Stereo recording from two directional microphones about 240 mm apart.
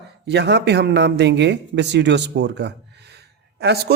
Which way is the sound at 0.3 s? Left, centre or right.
Right.